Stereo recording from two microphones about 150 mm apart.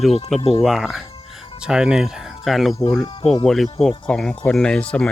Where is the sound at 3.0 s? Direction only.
40° left (ahead or behind).